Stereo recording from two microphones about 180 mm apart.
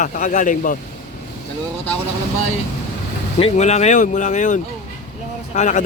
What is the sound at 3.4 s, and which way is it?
A man's voice, 40° left (ahead or behind).